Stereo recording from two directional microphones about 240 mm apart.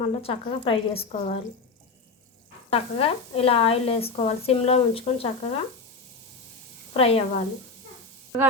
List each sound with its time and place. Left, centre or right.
0.0 s speech: left
2.6 s speech: left
6.9 s speech: left